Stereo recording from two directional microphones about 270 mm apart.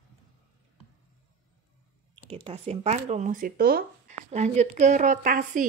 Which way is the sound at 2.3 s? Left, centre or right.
Right.